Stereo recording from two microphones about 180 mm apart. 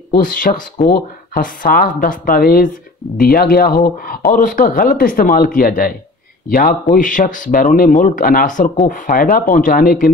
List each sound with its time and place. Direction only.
0.1 s speech: 50° left (ahead or behind)